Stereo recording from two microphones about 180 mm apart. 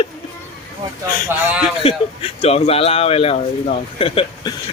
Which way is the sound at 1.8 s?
35° left (ahead or behind).